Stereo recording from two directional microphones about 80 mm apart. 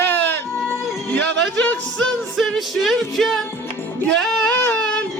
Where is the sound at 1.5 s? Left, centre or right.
Centre.